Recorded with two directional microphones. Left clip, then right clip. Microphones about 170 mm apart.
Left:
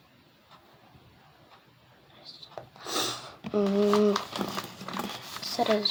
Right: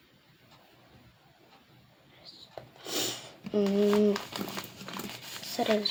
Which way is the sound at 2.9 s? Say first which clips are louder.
Left 3 dB; 30° right (ahead or behind).